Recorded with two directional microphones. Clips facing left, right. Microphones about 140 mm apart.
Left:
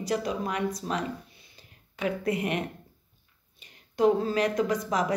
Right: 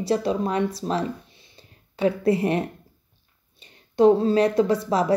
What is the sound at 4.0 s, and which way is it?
Speech, 30° right (ahead or behind).